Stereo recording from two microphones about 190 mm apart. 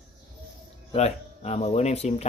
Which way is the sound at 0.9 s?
35° left (ahead or behind).